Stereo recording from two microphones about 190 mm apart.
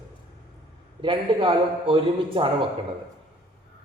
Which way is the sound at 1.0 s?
25° right (ahead or behind).